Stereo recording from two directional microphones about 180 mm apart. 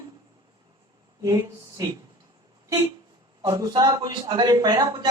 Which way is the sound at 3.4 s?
20° right (ahead or behind).